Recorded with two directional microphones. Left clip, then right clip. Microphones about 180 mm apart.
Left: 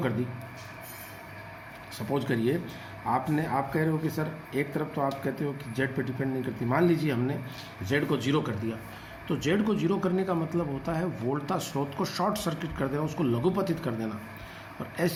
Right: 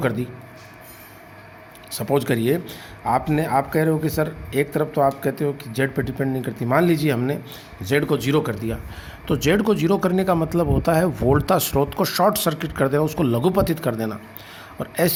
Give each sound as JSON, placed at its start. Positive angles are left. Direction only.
{"t": 1.9, "sound": "speech", "side_deg": -55}